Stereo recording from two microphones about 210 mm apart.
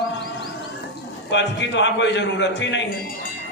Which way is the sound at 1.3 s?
55° left (ahead or behind).